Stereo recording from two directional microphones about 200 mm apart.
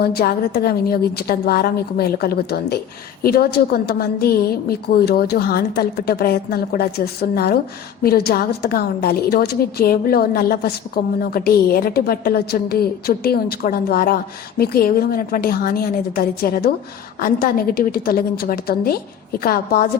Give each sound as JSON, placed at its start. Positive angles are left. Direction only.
{"t": 0.0, "sound": "a woman's voice", "side_deg": 50}